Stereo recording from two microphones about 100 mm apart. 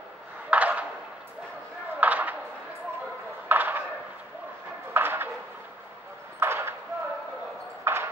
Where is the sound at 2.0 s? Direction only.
15° right (ahead or behind).